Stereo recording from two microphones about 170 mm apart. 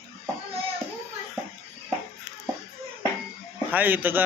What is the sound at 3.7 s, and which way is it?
Speech, 10° right (ahead or behind).